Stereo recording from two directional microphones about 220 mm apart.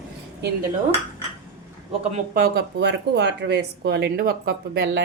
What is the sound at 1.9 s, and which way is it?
Speech, 30° right (ahead or behind).